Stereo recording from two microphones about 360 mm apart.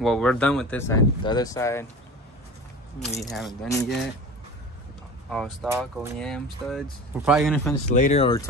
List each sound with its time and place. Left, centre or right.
0.0 s speech: centre
3.0 s speech: centre
5.3 s speech: centre
7.9 s speech: centre